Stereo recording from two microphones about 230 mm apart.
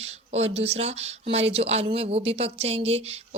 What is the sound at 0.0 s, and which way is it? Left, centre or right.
Speech, right.